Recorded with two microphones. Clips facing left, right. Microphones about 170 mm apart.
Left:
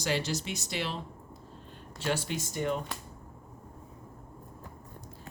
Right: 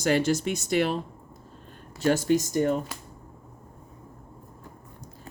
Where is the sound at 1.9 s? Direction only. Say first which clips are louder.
Right 10 dB; 45° right (ahead or behind).